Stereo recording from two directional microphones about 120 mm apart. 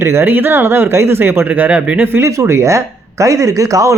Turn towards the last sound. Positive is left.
turn(degrees=-30)  # may be behind; listen again after turning